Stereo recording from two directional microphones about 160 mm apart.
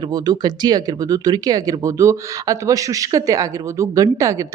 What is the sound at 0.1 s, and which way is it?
Speech, 25° right (ahead or behind).